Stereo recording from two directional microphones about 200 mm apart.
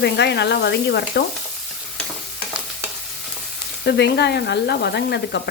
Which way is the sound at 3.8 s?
55° left (ahead or behind).